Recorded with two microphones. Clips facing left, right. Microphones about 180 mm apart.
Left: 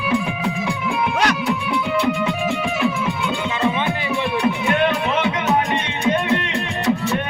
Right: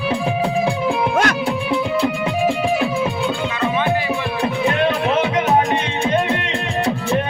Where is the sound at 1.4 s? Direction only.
30° right (ahead or behind).